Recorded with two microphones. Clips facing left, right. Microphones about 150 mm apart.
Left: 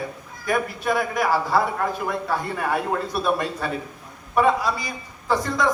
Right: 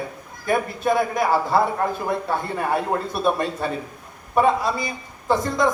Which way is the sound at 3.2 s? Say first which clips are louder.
Right 2 dB; 25° right (ahead or behind).